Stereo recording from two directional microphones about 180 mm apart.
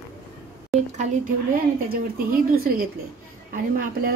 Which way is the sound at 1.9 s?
55° right (ahead or behind).